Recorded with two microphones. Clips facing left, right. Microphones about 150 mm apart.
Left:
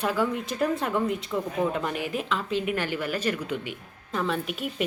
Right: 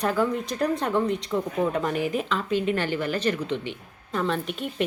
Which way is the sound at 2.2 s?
Centre (ahead or behind).